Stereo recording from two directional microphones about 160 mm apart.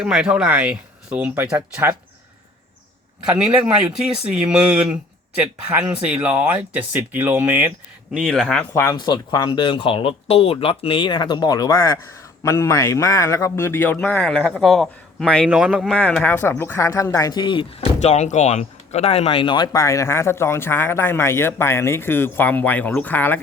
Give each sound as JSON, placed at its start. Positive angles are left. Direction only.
{"t": 0.0, "sound": "speech", "side_deg": -5}
{"t": 3.2, "sound": "speech", "side_deg": -5}
{"t": 8.1, "sound": "speech", "side_deg": 0}
{"t": 8.7, "sound": "speech", "side_deg": 15}
{"t": 9.0, "sound": "speech", "side_deg": 25}
{"t": 16.0, "sound": "speech", "side_deg": 10}